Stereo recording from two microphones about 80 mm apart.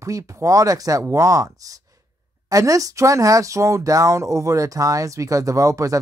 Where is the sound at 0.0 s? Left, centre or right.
Right.